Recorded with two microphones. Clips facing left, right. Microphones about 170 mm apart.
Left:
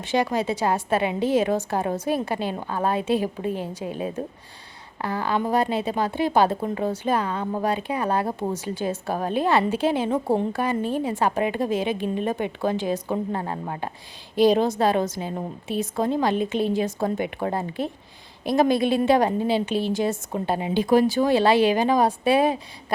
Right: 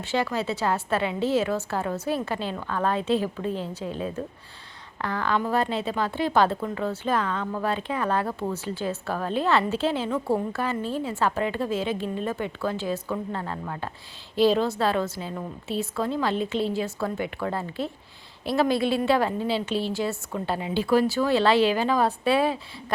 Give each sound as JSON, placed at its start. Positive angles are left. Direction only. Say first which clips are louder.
{"t": 0.0, "sound": "a woman's voice", "louder": "left 3 dB", "side_deg": 15}
{"t": 7.4, "sound": "a woman's voice", "louder": "left 3 dB", "side_deg": 25}
{"t": 7.7, "sound": "a woman's voice", "louder": "left 1 dB", "side_deg": 15}